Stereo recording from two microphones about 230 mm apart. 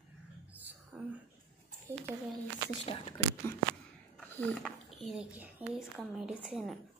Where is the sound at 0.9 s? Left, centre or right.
Centre.